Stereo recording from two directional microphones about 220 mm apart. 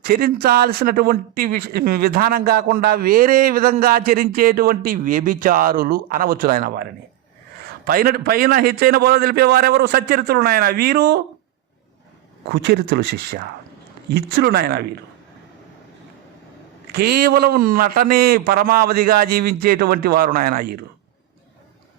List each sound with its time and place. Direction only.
0.0 s speech: 45° right (ahead or behind)
7.9 s a man's voice: 40° right (ahead or behind)
12.5 s a man's voice: 50° right (ahead or behind)
16.9 s a man's voice: 45° right (ahead or behind)